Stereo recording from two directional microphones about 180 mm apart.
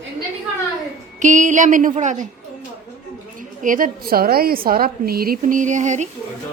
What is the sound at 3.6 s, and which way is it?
A woman's voice, 50° right (ahead or behind).